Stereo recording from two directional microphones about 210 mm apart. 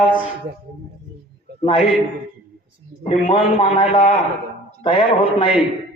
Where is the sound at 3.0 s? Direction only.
25° left (ahead or behind).